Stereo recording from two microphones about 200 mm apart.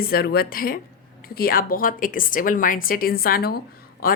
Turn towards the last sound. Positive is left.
turn(degrees=45)  # may be behind; listen again after turning